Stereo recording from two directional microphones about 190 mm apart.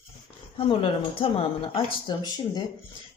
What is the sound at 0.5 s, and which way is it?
Speech, 30° left (ahead or behind).